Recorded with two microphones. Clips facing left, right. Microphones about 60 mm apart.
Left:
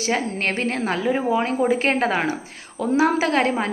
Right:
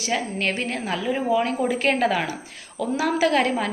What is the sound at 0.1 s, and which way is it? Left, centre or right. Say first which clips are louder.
A woman's voice: left 1 dB; left.